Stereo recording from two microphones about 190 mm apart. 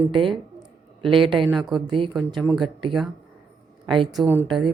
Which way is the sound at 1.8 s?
25° right (ahead or behind).